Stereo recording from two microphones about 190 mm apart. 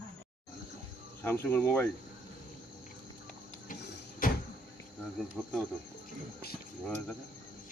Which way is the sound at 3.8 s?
60° left (ahead or behind).